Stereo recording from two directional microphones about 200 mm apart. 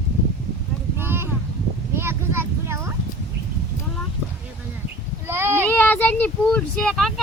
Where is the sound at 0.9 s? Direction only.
10° right (ahead or behind).